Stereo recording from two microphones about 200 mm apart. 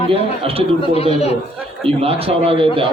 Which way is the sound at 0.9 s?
30° left (ahead or behind).